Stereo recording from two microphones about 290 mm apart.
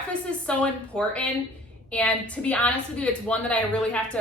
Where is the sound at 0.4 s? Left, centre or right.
Centre.